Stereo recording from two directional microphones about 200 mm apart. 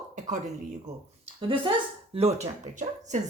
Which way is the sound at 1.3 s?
25° right (ahead or behind).